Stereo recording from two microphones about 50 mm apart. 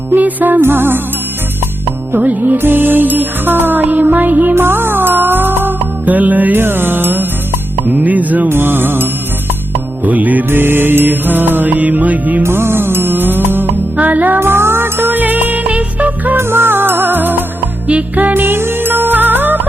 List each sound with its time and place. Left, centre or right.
0.1 s music: right
0.6 s music: right
2.1 s music: right
4.5 s music: right
6.6 s music: right
8.4 s music: right
10.0 s music: right
10.5 s music: right
11.7 s music: right
12.4 s music: right
13.9 s music: right
14.3 s music: right
16.4 s music: right